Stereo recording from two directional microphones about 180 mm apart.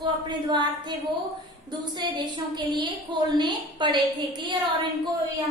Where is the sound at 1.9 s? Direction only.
25° right (ahead or behind).